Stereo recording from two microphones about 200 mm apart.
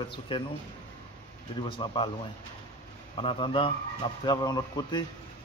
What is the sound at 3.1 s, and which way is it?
A man's voice, 25° left (ahead or behind).